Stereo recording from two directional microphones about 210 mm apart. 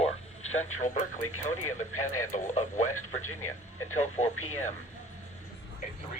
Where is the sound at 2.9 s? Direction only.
90° left.